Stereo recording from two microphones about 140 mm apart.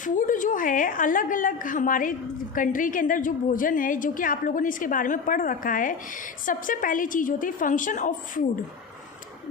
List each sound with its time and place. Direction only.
0.0 s a woman's voice: 70° left (ahead or behind)